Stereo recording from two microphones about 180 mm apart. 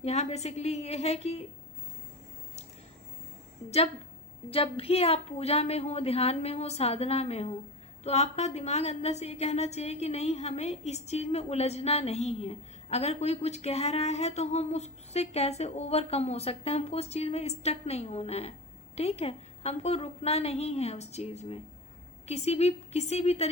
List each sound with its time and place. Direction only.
0.0 s a woman's voice: 35° left (ahead or behind)
4.4 s a woman's voice: 30° left (ahead or behind)